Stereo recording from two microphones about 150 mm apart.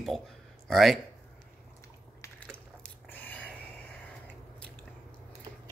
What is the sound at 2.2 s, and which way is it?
Biting, 10° left (ahead or behind).